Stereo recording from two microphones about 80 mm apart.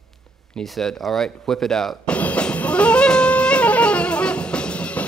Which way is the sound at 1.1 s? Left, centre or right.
Centre.